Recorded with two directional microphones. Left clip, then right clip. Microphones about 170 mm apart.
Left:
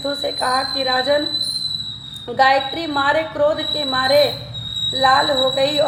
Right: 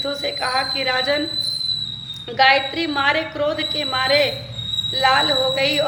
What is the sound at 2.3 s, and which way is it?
A woman's voice, 20° left (ahead or behind).